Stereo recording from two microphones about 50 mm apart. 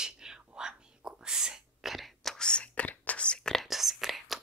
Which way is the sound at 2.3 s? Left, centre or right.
Centre.